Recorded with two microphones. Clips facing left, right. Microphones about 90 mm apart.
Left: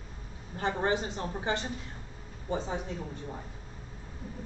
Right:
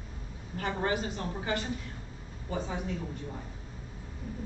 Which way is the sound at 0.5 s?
25° left (ahead or behind).